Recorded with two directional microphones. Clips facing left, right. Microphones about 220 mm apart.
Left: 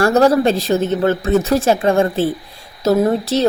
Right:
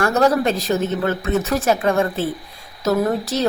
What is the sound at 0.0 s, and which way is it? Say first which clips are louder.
A woman's voice: left 4 dB; 30° left (ahead or behind).